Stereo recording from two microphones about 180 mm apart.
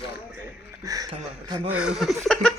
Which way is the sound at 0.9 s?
20° right (ahead or behind).